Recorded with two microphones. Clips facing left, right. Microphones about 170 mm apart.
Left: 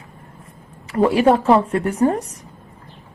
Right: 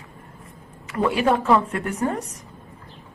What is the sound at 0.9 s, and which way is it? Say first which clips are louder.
A woman's voice: left 6 dB; 30° left (ahead or behind).